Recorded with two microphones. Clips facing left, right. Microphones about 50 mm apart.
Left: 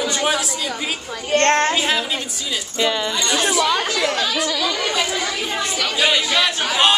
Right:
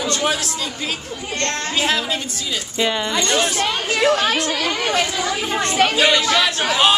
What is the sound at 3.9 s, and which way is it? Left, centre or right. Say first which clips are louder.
Speech: right 4 dB; right.